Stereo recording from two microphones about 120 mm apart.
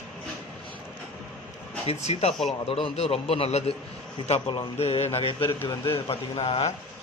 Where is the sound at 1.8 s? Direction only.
60° left (ahead or behind).